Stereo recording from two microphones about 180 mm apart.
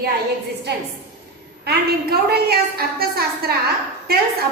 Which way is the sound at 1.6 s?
60° right (ahead or behind).